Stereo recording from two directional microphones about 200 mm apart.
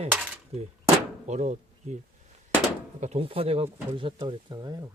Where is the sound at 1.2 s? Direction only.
35° right (ahead or behind).